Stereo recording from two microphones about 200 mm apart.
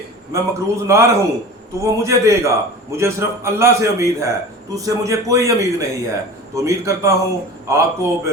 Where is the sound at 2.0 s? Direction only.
15° right (ahead or behind).